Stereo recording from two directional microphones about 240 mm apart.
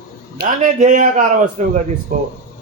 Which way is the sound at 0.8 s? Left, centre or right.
Right.